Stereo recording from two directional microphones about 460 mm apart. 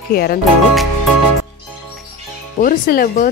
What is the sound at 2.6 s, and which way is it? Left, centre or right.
Speech, centre.